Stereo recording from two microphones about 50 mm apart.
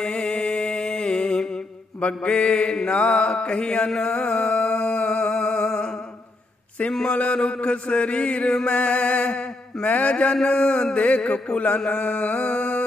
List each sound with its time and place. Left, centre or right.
0.0 s music: centre
2.0 s mantra: left
6.9 s speech: centre
7.2 s mantra: left